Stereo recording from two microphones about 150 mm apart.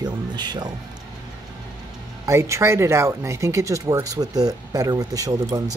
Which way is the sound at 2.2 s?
20° right (ahead or behind).